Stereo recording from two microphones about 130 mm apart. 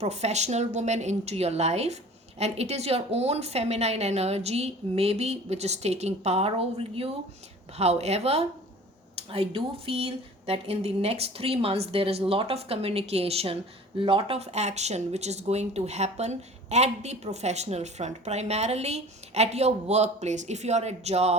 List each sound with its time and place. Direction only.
0.0 s speech: 55° right (ahead or behind)